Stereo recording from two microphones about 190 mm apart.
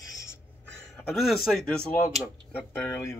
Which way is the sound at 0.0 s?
15° left (ahead or behind).